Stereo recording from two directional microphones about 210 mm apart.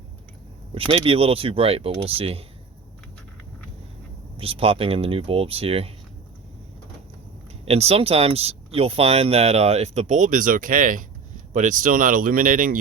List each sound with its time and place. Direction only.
0.7 s speech: 25° right (ahead or behind)
4.4 s speech: 25° right (ahead or behind)
7.6 s speech: 30° right (ahead or behind)